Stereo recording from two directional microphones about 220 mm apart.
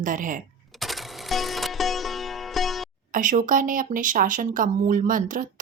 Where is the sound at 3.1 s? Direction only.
35° right (ahead or behind).